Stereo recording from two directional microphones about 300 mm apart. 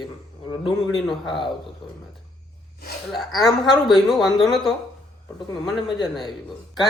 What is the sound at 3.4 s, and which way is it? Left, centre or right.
A woman's voice, centre.